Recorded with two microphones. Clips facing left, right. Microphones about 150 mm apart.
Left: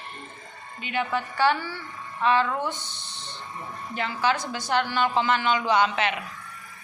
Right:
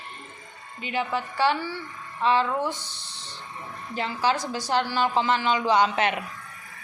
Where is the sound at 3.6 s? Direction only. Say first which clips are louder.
Left 1 dB; centre (ahead or behind).